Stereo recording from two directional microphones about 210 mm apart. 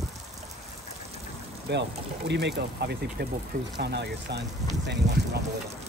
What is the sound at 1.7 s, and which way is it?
Speech, 55° right (ahead or behind).